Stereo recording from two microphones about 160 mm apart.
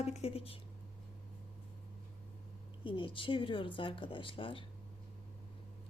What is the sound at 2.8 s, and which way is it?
A woman's voice, 30° left (ahead or behind).